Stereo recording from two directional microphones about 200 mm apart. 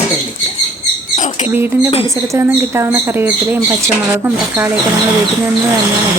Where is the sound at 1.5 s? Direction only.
10° right (ahead or behind).